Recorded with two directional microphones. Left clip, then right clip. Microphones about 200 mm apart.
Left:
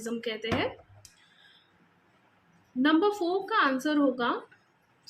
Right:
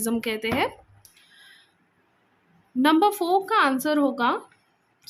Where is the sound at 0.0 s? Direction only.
55° right (ahead or behind).